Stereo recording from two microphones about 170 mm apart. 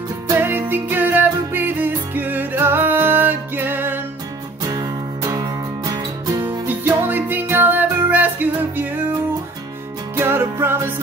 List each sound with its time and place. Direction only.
0.3 s music: 10° right (ahead or behind)
4.6 s music: 20° right (ahead or behind)
10.1 s music: 15° right (ahead or behind)